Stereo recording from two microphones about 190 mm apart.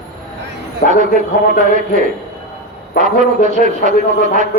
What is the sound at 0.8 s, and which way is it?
Speech, 50° left (ahead or behind).